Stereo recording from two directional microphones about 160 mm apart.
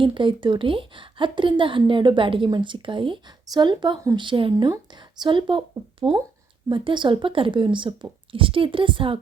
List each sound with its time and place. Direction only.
0.0 s a woman's voice: 30° right (ahead or behind)